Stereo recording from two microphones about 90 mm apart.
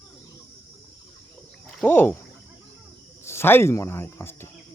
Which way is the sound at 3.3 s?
25° left (ahead or behind).